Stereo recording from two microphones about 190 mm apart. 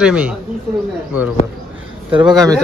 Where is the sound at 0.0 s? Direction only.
5° right (ahead or behind).